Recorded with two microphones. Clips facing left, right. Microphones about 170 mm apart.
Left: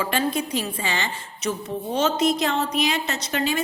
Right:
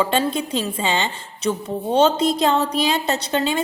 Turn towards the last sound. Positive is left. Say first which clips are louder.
# right 4 dB
turn(degrees=-25)  # may be behind; listen again after turning